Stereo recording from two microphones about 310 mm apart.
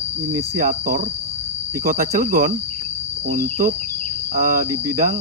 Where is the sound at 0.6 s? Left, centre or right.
Right.